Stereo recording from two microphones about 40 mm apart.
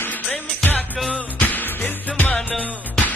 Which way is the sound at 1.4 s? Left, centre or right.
Left.